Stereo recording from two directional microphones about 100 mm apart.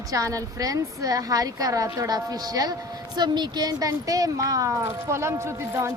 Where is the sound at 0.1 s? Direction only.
35° right (ahead or behind).